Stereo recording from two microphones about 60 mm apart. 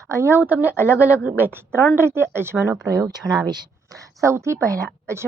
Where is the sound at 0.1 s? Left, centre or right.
Right.